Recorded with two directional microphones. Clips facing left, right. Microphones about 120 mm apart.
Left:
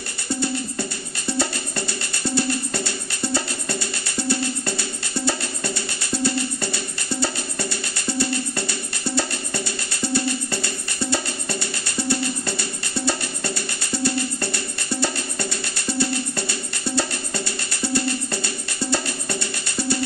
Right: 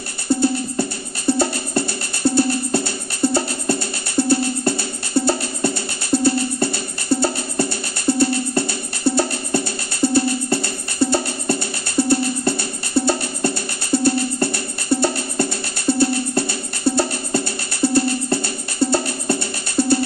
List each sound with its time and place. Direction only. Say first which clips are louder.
0.3 s music: right 7 dB; 50° right (ahead or behind)